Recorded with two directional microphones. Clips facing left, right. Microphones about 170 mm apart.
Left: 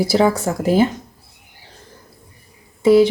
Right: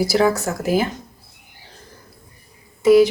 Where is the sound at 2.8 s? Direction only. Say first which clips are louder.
Even; 30° left (ahead or behind).